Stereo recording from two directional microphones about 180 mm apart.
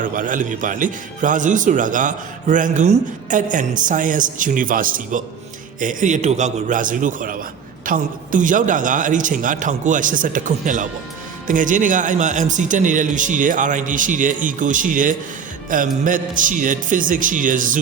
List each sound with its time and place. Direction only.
0.0 s a man's voice: 45° right (ahead or behind)